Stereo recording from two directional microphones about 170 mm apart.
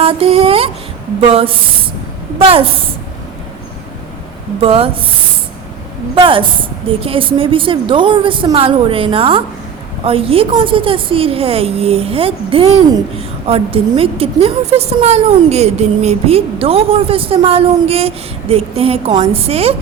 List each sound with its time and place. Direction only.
0.0 s a sound: 35° right (ahead or behind)
1.3 s a woman's voice: 35° right (ahead or behind)
4.6 s a woman's voice: 35° right (ahead or behind)
6.1 s a woman's voice: 30° right (ahead or behind)